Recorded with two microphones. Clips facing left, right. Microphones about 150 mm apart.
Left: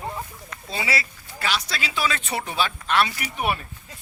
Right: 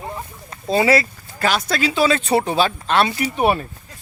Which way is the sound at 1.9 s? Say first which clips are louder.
Right 9 dB; 30° right (ahead or behind).